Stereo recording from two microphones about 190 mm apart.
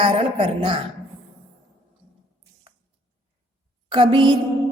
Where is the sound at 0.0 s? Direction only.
25° right (ahead or behind).